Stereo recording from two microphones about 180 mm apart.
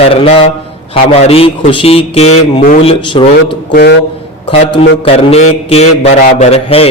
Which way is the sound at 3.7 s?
65° left (ahead or behind).